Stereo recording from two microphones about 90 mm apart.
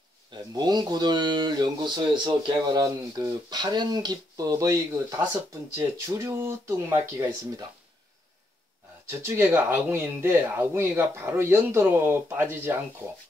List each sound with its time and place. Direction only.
0.3 s speech: 50° right (ahead or behind); by 7.2 s 30° right (ahead or behind)
9.2 s speech: 25° right (ahead or behind)